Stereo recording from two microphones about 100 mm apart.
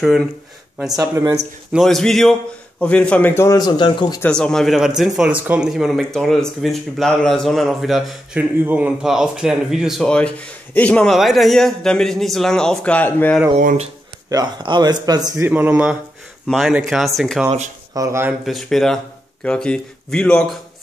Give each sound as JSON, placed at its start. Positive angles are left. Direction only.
{"t": 0.0, "sound": "speech", "side_deg": 0}
{"t": 1.7, "sound": "speech", "side_deg": 0}
{"t": 3.4, "sound": "speech", "side_deg": 45}
{"t": 4.3, "sound": "speech", "side_deg": 10}
{"t": 8.4, "sound": "speech", "side_deg": -15}
{"t": 10.0, "sound": "speech", "side_deg": 10}
{"t": 11.1, "sound": "speech", "side_deg": 0}
{"t": 14.3, "sound": "speech", "side_deg": -45}
{"t": 15.3, "sound": "speech", "side_deg": -20}
{"t": 16.4, "sound": "speech", "side_deg": 0}
{"t": 17.9, "sound": "speech", "side_deg": -35}
{"t": 18.4, "sound": "speech", "side_deg": 0}